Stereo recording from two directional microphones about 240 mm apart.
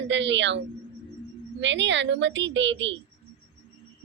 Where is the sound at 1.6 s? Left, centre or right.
Right.